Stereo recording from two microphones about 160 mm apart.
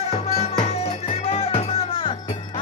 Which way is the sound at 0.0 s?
40° left (ahead or behind).